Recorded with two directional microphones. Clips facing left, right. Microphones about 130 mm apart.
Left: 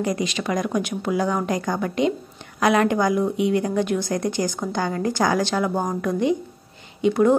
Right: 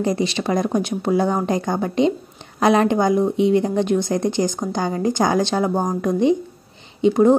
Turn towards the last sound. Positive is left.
turn(degrees=-25)  # may be behind; listen again after turning